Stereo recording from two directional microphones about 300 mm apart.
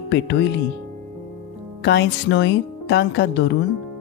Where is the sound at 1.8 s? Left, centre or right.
Left.